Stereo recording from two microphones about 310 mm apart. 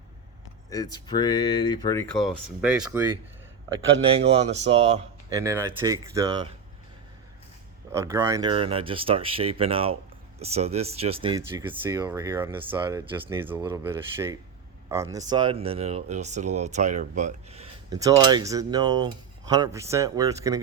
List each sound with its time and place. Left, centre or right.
0.7 s speech: centre
2.6 s speech: centre
4.0 s speech: centre
7.9 s speech: centre